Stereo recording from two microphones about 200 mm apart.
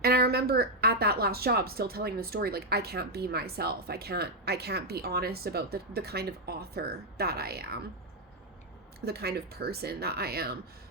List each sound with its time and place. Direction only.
0.0 s a woman's voice: 50° right (ahead or behind)
9.0 s a woman's voice: 50° right (ahead or behind)